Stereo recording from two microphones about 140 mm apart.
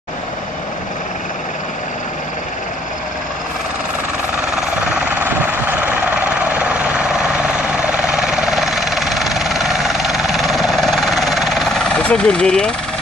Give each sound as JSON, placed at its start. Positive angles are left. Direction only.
{"t": 5.2, "sound": "helicopter", "side_deg": -15}